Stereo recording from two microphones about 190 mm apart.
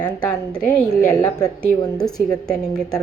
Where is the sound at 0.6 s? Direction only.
15° left (ahead or behind).